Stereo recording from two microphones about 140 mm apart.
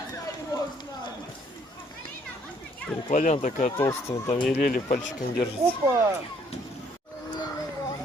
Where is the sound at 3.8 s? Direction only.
20° left (ahead or behind).